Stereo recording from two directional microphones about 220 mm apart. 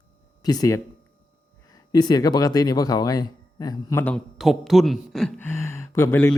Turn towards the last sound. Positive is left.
turn(degrees=10)  # may be behind; listen again after turning